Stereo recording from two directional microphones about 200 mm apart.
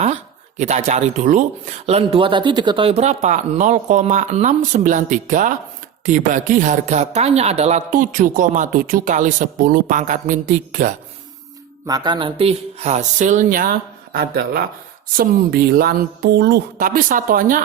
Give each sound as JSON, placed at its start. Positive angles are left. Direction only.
{"t": 0.0, "sound": "speech", "side_deg": -35}
{"t": 11.9, "sound": "a woman's voice", "side_deg": -20}